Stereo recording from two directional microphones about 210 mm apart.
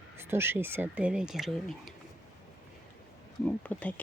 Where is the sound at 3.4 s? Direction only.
5° left (ahead or behind).